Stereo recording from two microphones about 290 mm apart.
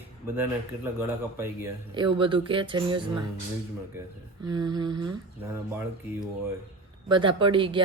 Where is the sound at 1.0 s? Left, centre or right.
Centre.